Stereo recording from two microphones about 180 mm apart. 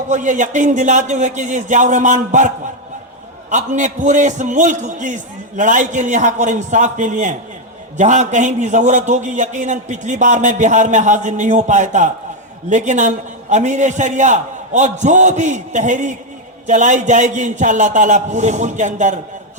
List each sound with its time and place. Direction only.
0.1 s a man's voice: 45° right (ahead or behind)
3.5 s a man's voice: 40° right (ahead or behind)